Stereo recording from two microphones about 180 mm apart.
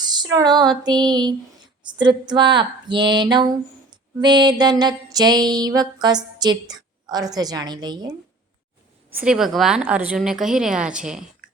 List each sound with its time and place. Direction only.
0.0 s mantra: 20° right (ahead or behind)
9.1 s a woman's voice: 5° right (ahead or behind)